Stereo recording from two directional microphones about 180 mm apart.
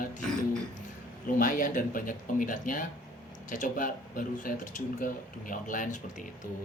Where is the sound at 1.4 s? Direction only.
50° left (ahead or behind).